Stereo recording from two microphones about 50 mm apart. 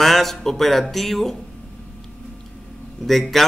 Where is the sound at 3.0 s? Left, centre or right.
Centre.